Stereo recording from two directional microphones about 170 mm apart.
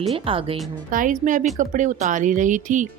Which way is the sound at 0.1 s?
30° right (ahead or behind).